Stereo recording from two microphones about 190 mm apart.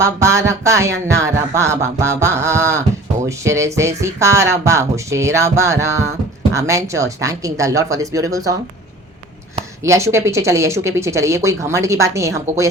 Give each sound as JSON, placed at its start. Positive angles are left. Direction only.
{"t": 0.0, "sound": "speech", "side_deg": -15}
{"t": 9.8, "sound": "speech", "side_deg": -15}